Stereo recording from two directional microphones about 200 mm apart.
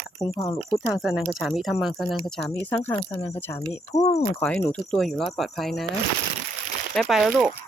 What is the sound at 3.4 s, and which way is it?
Speech, 10° left (ahead or behind).